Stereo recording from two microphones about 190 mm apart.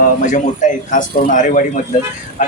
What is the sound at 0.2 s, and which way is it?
A man's voice, 40° left (ahead or behind).